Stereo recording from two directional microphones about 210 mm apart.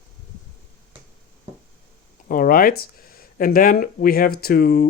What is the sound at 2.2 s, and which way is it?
Speech, 40° left (ahead or behind).